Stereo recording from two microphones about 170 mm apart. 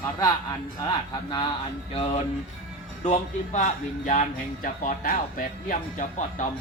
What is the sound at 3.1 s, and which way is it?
Speech, 45° left (ahead or behind).